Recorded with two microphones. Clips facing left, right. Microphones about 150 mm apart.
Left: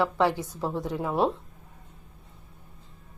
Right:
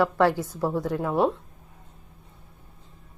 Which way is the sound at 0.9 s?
5° left (ahead or behind).